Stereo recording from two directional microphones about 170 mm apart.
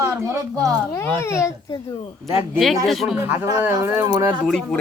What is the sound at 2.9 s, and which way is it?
Speech, centre (ahead or behind).